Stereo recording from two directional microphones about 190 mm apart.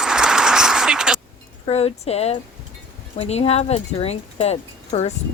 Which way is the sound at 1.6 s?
30° left (ahead or behind).